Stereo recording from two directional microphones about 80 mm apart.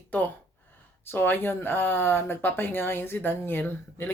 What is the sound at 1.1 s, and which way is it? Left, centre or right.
Speech, left.